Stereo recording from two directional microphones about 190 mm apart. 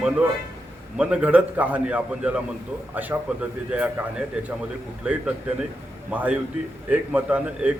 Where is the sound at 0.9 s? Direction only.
5° right (ahead or behind).